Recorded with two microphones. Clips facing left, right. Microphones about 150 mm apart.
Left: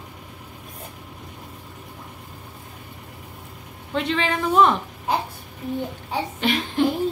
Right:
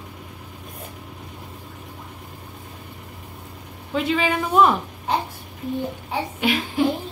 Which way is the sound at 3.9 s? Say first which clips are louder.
Right 2 dB; 5° right (ahead or behind).